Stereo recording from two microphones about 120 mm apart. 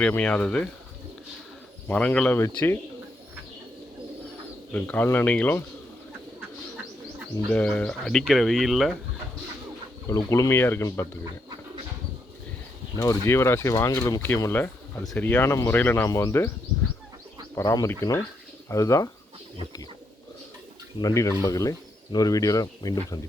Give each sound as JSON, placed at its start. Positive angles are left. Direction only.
{"t": 0.0, "sound": "speech", "side_deg": 10}
{"t": 1.9, "sound": "speech", "side_deg": 10}
{"t": 4.7, "sound": "speech", "side_deg": 10}
{"t": 7.5, "sound": "speech", "side_deg": 10}
{"t": 10.1, "sound": "speech", "side_deg": 25}
{"t": 13.0, "sound": "speech", "side_deg": 25}
{"t": 15.8, "sound": "speech", "side_deg": 15}
{"t": 17.5, "sound": "speech", "side_deg": 30}
{"t": 21.0, "sound": "speech", "side_deg": 25}